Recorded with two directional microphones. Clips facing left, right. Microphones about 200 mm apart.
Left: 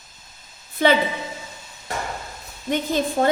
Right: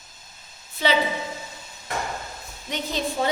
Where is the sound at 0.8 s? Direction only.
50° left (ahead or behind).